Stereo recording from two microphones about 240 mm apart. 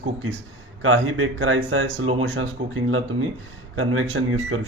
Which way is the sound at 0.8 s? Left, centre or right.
Right.